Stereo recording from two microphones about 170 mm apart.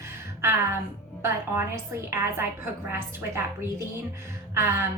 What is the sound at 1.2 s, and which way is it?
A woman's voice, 15° right (ahead or behind).